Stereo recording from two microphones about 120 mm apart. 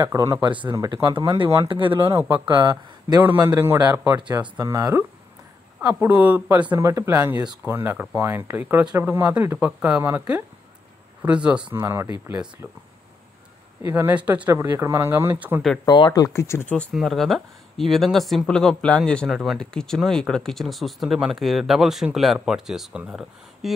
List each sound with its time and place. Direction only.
0.1 s speech: 25° right (ahead or behind)
0.4 s speech: 40° right (ahead or behind)
0.7 s speech: 30° right (ahead or behind)
2.4 s speech: 40° right (ahead or behind)
3.2 s speech: 15° right (ahead or behind)
4.2 s speech: 40° right (ahead or behind)
4.6 s speech: 25° right (ahead or behind)
6.8 s speech: 25° right (ahead or behind)
11.7 s speech: 20° right (ahead or behind)
13.8 s speech: 20° right (ahead or behind)
15.9 s speech: 35° left (ahead or behind)
16.9 s speech: centre (ahead or behind)